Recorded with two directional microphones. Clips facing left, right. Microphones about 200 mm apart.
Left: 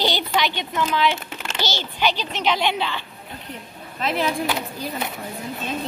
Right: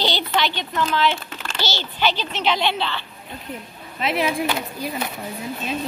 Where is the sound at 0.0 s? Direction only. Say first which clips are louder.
Even; 15° left (ahead or behind).